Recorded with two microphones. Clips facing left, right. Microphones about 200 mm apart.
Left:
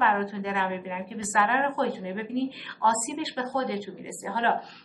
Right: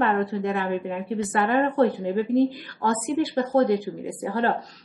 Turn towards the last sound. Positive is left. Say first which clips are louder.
# right 4 dB
turn(degrees=-40)  # may be behind; listen again after turning